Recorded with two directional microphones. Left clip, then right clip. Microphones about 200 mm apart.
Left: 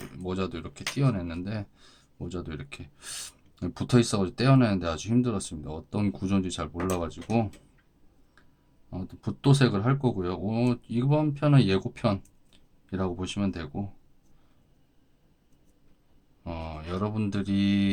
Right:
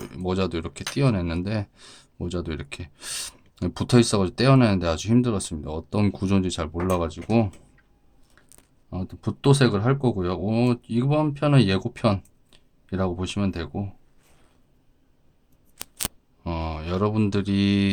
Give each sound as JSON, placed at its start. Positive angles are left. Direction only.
{"t": 0.0, "sound": "speech", "side_deg": -35}
{"t": 8.9, "sound": "speech", "side_deg": -35}
{"t": 16.4, "sound": "speech", "side_deg": -35}